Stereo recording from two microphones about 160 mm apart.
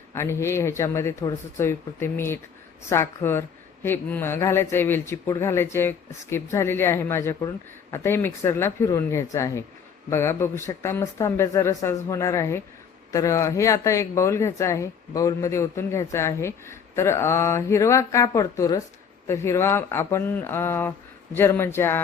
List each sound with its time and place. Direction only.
0.1 s speech: 15° left (ahead or behind)